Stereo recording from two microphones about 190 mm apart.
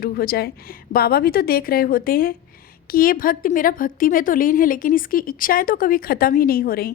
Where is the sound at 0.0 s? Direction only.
55° left (ahead or behind).